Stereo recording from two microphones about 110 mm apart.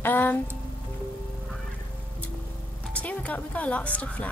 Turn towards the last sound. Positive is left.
turn(degrees=15)  # may be behind; listen again after turning